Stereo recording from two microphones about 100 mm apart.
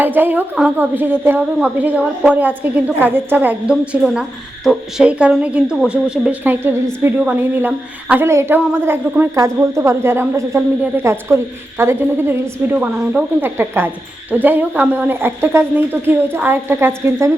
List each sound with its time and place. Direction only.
0.0 s a woman's voice: 20° right (ahead or behind)
4.0 s a woman's voice: 5° right (ahead or behind)
6.4 s a woman's voice: 20° right (ahead or behind)